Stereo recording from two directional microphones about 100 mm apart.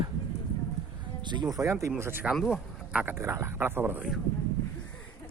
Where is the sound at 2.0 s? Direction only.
25° right (ahead or behind).